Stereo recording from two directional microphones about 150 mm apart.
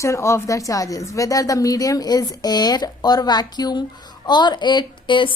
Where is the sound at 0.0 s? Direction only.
20° left (ahead or behind).